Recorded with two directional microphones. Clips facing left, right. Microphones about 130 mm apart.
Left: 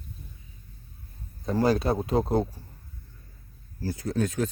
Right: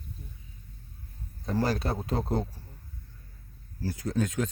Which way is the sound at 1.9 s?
40° left (ahead or behind).